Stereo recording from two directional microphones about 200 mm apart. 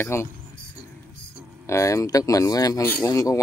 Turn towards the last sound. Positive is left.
turn(degrees=15)  # may be behind; listen again after turning